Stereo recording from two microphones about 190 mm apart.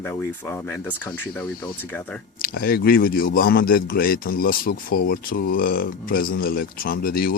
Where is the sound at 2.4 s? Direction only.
55° left (ahead or behind).